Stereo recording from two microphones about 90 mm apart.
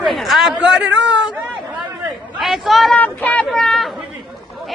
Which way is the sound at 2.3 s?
Centre (ahead or behind).